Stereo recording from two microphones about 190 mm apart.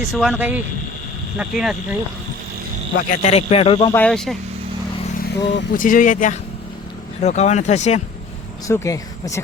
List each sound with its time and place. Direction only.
0.0 s speech: centre (ahead or behind)
3.0 s speech: 40° left (ahead or behind)
3.9 s speech: 5° left (ahead or behind)
5.2 s speech: 50° left (ahead or behind)
8.6 s speech: 15° left (ahead or behind)